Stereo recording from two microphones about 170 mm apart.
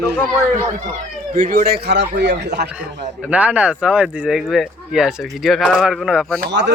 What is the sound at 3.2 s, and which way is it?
Speech, 10° right (ahead or behind).